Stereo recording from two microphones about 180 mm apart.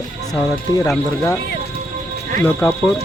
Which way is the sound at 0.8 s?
20° left (ahead or behind).